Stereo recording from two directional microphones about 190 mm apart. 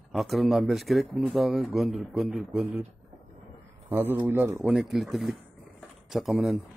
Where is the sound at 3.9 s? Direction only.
10° right (ahead or behind).